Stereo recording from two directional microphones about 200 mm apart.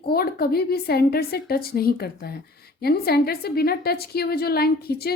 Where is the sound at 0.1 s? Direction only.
50° left (ahead or behind).